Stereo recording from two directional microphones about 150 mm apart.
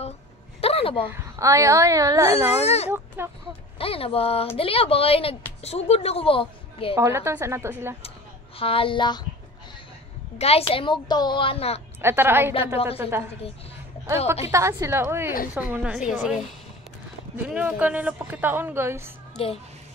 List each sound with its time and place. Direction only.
0.6 s a sound: 40° left (ahead or behind)
1.0 s a woman's voice: 20° right (ahead or behind)
2.6 s a woman's voice: 45° left (ahead or behind)
3.2 s a woman's voice: 15° right (ahead or behind)
3.7 s a woman's voice: 40° left (ahead or behind)
7.0 s a woman's voice: 20° right (ahead or behind)
8.5 s a woman's voice: 35° left (ahead or behind)
10.3 s a woman's voice: 45° left (ahead or behind)
12.0 s a woman's voice: 15° right (ahead or behind)
12.7 s a woman's voice: 40° left (ahead or behind)
14.0 s a woman's voice: 15° right (ahead or behind)
17.6 s a woman's voice: 10° right (ahead or behind)
19.3 s a child's voice: 40° left (ahead or behind)